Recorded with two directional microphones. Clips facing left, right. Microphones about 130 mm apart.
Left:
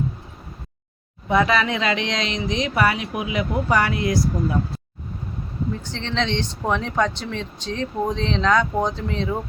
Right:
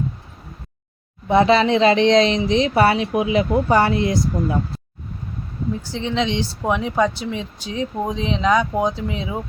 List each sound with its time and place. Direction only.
1.3 s speech: 30° right (ahead or behind)
5.8 s speech: 10° right (ahead or behind)